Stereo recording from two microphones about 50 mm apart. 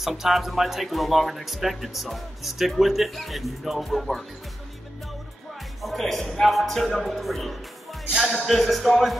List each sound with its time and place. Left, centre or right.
0.0 s speech: centre
5.8 s speech: centre